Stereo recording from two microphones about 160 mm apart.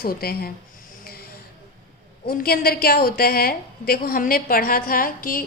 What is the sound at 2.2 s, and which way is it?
A woman's voice, 70° left (ahead or behind).